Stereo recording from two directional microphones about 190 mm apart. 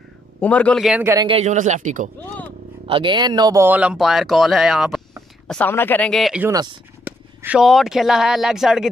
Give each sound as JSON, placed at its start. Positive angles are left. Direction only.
{"t": 0.4, "sound": "a man's voice", "side_deg": 5}
{"t": 1.0, "sound": "a man's voice", "side_deg": -20}
{"t": 1.3, "sound": "speech", "side_deg": -35}
{"t": 2.1, "sound": "vehicle", "side_deg": 10}
{"t": 2.9, "sound": "speech", "side_deg": -25}
{"t": 5.5, "sound": "speech", "side_deg": 10}
{"t": 6.4, "sound": "speech", "side_deg": -20}
{"t": 7.1, "sound": "speech", "side_deg": -5}